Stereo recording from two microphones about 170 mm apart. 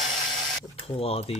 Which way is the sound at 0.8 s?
35° left (ahead or behind).